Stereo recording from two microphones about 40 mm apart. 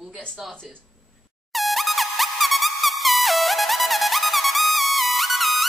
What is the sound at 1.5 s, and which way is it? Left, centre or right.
Music, centre.